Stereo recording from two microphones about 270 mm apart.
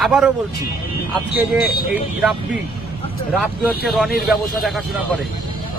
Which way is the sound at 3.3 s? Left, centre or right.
Centre.